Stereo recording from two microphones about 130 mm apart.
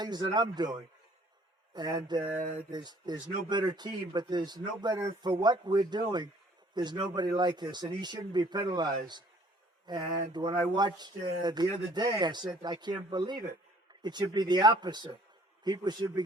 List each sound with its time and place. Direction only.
0.0 s speech: 35° right (ahead or behind)
1.7 s speech: 30° right (ahead or behind)